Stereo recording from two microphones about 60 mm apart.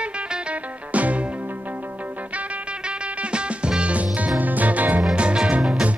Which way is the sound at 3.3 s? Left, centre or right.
Centre.